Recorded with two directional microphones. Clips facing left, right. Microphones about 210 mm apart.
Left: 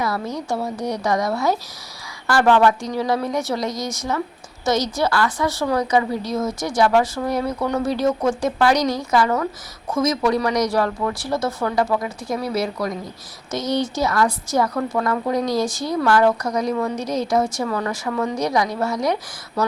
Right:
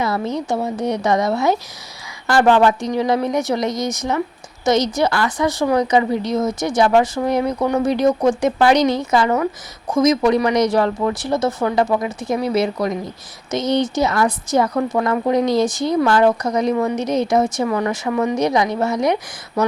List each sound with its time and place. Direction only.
0.0 s a woman's voice: 20° right (ahead or behind)